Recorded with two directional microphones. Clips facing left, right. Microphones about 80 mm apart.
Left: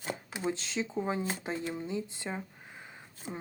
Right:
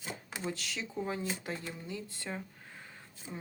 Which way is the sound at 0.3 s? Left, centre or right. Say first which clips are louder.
Left 3 dB; centre.